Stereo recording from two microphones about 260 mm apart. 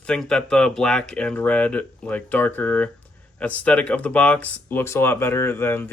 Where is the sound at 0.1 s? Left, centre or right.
Centre.